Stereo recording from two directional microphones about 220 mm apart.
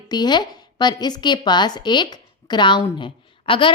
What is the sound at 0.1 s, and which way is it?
A woman's voice, 20° left (ahead or behind).